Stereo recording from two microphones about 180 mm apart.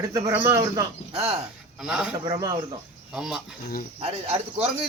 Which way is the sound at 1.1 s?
30° right (ahead or behind).